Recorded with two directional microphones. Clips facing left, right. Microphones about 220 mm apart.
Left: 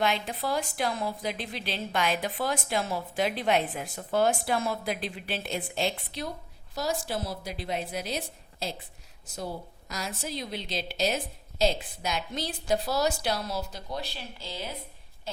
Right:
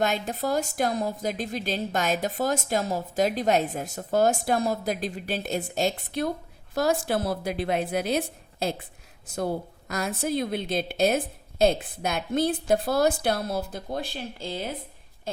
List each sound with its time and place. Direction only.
0.0 s a woman's voice: 45° right (ahead or behind)